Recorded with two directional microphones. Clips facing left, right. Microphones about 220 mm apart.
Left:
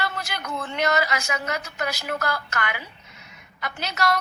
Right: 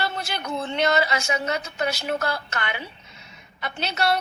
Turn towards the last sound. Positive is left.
turn(degrees=-30)  # may be behind; listen again after turning